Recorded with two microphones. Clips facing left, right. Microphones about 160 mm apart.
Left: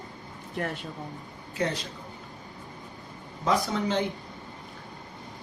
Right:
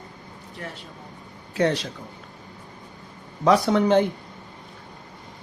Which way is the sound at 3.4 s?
70° right (ahead or behind).